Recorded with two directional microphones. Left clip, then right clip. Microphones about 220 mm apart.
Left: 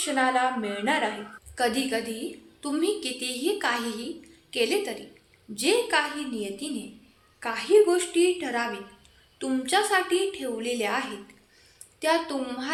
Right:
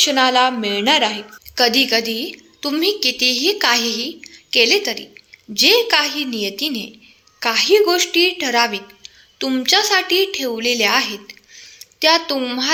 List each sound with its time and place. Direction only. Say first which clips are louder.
0.0 s a woman's voice: right 10 dB; 40° right (ahead or behind)